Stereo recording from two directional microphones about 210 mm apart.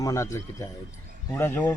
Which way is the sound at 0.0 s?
15° left (ahead or behind).